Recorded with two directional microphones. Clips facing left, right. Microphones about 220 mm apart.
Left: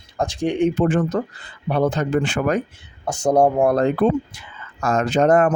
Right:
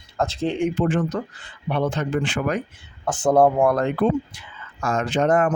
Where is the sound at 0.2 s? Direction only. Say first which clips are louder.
Left 3 dB; 15° left (ahead or behind).